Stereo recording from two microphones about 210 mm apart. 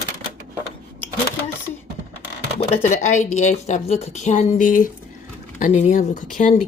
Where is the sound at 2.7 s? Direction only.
35° left (ahead or behind).